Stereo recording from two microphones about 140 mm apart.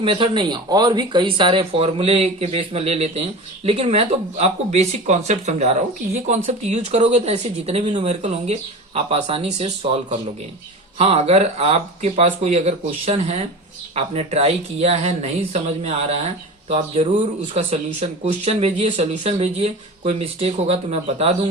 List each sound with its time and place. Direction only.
0.0 s speech: 35° right (ahead or behind)